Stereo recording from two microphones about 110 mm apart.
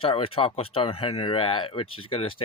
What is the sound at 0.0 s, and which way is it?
Speech, 55° left (ahead or behind).